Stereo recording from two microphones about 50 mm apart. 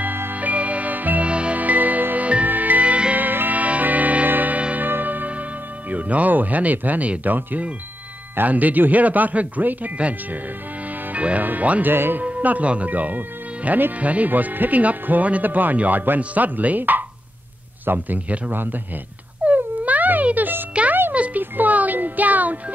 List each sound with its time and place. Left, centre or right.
0.0 s music: right
3.3 s music: right
4.8 s music: right
5.9 s speech: right
11.9 s speech: right
12.2 s speech: right
13.9 s speech: right
19.4 s music: right